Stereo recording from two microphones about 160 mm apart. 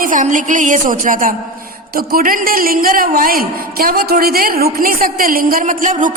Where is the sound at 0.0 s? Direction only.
55° right (ahead or behind).